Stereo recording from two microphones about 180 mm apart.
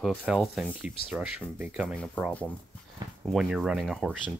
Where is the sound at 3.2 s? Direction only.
Centre (ahead or behind).